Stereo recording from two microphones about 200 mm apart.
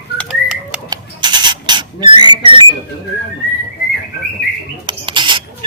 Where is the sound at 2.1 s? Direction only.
20° right (ahead or behind).